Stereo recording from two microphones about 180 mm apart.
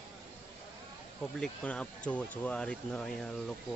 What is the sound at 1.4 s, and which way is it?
Speech, 5° left (ahead or behind).